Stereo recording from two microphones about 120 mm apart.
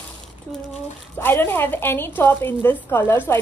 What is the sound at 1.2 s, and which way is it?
A woman's voice, 20° left (ahead or behind).